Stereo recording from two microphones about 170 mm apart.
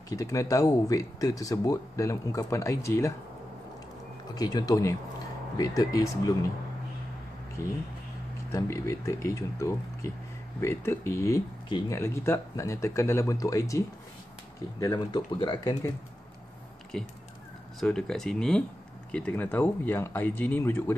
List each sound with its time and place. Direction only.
0.1 s speech: 20° left (ahead or behind)
4.4 s speech: 25° left (ahead or behind)
7.6 s speech: 20° left (ahead or behind)
16.9 s speech: 5° left (ahead or behind)